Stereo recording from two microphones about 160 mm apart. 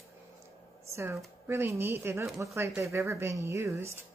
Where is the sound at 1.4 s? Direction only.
15° right (ahead or behind).